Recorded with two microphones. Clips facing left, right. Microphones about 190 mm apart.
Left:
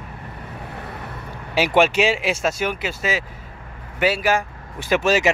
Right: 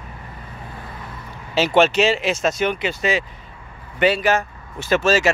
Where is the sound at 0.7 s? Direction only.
65° left (ahead or behind).